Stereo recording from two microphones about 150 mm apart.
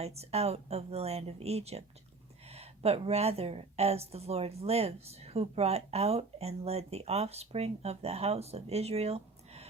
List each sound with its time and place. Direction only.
0.0 s a woman's voice: 45° right (ahead or behind)